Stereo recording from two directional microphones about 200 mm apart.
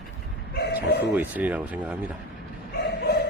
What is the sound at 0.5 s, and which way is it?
Speech, 55° left (ahead or behind).